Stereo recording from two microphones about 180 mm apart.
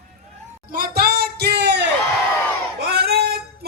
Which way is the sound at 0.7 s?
55° right (ahead or behind).